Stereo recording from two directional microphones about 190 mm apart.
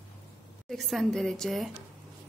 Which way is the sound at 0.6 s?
Centre (ahead or behind).